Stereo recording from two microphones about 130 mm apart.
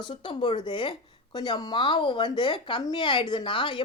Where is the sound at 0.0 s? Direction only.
40° left (ahead or behind).